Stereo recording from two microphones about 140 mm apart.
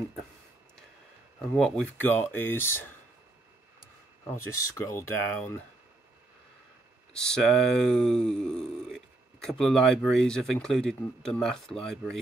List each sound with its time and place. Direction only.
1.5 s speech: 10° left (ahead or behind)
4.3 s speech: 20° left (ahead or behind)
7.2 s speech: 5° left (ahead or behind)